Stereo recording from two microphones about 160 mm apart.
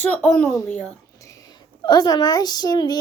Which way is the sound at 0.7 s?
10° left (ahead or behind).